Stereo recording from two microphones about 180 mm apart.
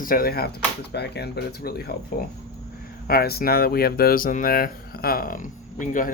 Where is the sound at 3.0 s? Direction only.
55° left (ahead or behind).